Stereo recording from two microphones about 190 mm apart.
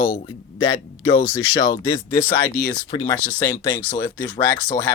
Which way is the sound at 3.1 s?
10° left (ahead or behind).